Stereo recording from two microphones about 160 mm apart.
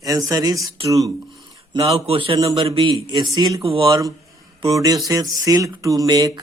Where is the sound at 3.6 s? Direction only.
35° right (ahead or behind).